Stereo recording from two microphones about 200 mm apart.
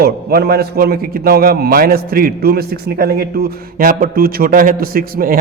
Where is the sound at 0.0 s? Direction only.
50° right (ahead or behind).